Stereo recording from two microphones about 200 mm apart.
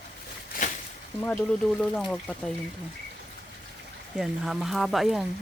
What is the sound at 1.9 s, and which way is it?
Speech, 5° left (ahead or behind).